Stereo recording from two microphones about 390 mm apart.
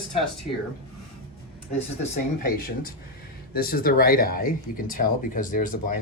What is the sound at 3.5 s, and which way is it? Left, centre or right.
Speech, left.